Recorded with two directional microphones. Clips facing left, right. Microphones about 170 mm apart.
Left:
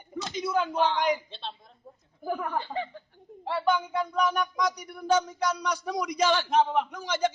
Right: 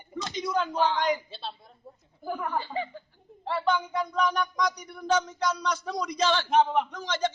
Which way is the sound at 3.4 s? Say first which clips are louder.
Left 1 dB; 10° left (ahead or behind).